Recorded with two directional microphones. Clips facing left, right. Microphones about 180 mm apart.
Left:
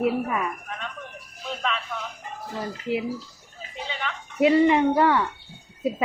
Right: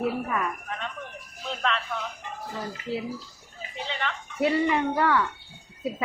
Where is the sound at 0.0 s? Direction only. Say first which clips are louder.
Left 3 dB; 15° left (ahead or behind).